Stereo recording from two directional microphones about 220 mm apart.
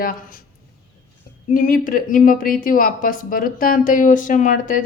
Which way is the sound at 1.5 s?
35° left (ahead or behind).